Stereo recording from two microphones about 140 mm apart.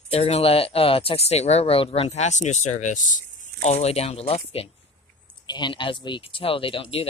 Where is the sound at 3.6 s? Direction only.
50° left (ahead or behind).